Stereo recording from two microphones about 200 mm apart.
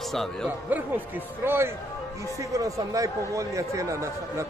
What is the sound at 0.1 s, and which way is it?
A man's voice, centre (ahead or behind).